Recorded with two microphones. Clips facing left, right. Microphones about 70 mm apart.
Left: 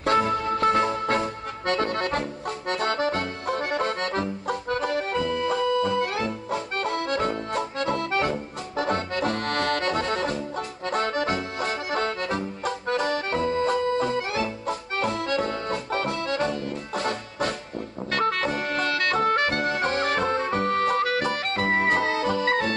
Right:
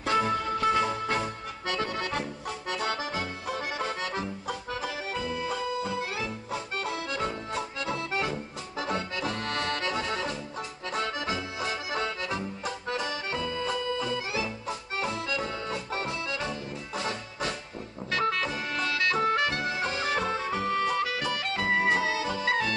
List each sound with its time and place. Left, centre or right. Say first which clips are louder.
0.0 s accordion: left 4 dB; left
18.1 s music: left 4 dB; left